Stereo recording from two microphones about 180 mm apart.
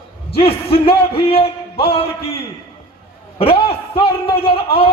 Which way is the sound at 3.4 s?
30° left (ahead or behind).